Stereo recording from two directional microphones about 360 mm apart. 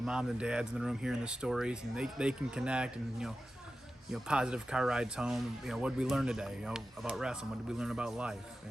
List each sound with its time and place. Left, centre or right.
0.0 s speech: centre